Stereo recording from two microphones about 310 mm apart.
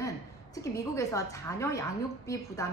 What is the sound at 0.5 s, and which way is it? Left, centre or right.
A woman's voice, centre.